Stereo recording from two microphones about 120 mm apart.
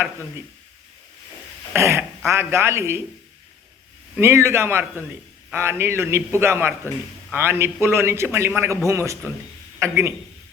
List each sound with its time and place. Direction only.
1.7 s a man's voice: 20° right (ahead or behind)
4.2 s a man's voice: 20° right (ahead or behind)